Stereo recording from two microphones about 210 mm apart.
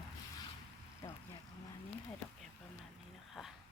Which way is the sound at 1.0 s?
20° left (ahead or behind).